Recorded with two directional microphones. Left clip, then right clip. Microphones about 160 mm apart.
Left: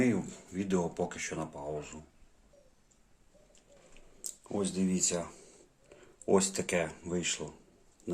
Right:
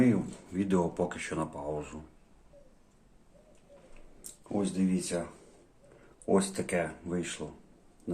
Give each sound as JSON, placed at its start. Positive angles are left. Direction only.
{"t": 0.0, "sound": "speech", "side_deg": 10}
{"t": 4.2, "sound": "speech", "side_deg": 35}
{"t": 6.2, "sound": "speech", "side_deg": 35}